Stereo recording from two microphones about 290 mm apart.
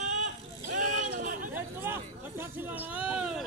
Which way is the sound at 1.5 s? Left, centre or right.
Centre.